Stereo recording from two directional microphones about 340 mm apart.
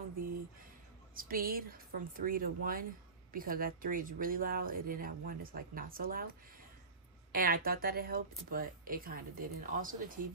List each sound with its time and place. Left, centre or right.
1.1 s speech: right